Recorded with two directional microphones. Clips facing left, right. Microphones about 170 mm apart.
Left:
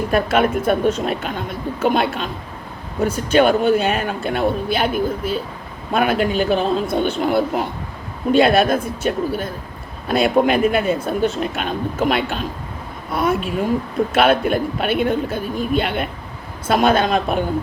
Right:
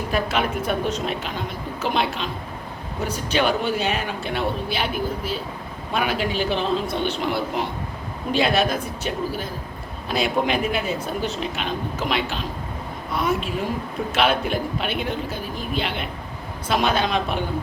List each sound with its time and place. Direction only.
0.1 s speech: 50° left (ahead or behind)
14.1 s speech: 50° left (ahead or behind)